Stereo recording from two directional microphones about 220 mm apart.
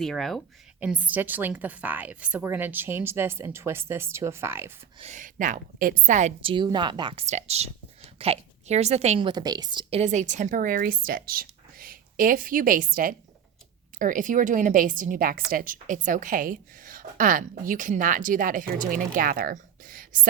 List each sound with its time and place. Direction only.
0.0 s a woman's voice: centre (ahead or behind)
4.9 s a woman's voice: 30° right (ahead or behind)
10.0 s a woman's voice: 35° right (ahead or behind)